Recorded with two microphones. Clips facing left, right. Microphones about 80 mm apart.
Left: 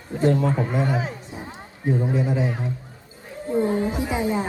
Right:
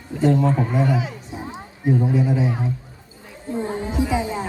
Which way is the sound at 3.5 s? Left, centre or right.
Centre.